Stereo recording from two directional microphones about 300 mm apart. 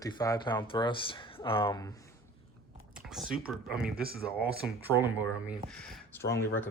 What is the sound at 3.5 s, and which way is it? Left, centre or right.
Speech, centre.